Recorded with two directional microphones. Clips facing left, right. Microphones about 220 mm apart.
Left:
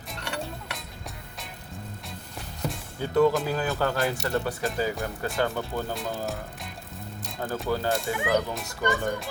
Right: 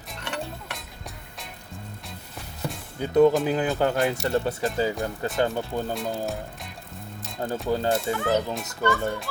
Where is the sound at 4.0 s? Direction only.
Centre (ahead or behind).